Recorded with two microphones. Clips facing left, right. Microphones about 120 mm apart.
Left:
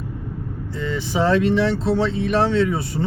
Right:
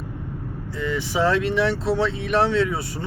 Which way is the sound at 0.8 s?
25° left (ahead or behind).